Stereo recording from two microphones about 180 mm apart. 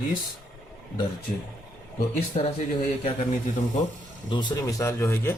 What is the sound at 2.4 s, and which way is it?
Speech, 40° left (ahead or behind).